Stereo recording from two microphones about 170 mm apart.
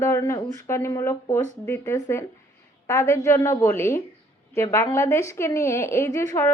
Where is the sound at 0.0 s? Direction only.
15° left (ahead or behind).